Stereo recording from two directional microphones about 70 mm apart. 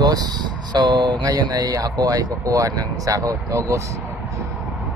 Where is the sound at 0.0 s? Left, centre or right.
Right.